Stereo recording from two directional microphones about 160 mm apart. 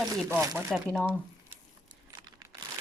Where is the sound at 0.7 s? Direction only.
Centre (ahead or behind).